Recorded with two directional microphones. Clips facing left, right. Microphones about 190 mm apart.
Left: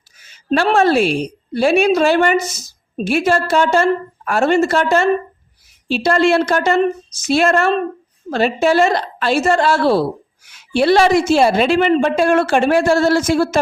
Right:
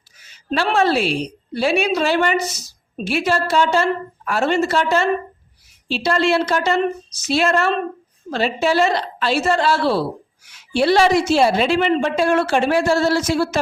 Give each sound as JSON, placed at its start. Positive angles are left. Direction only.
{"t": 0.5, "sound": "a woman's voice", "side_deg": 45}